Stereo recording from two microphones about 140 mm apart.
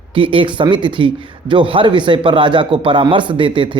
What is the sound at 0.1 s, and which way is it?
Speech, 40° right (ahead or behind).